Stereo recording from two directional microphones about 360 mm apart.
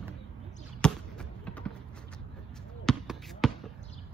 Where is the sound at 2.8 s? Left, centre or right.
Centre.